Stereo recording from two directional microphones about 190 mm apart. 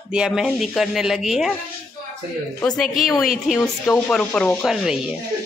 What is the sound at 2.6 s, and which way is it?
Speech, centre (ahead or behind).